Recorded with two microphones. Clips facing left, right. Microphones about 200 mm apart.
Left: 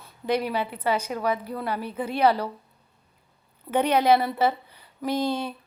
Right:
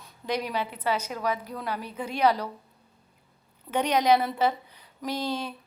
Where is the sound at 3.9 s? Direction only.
5° left (ahead or behind).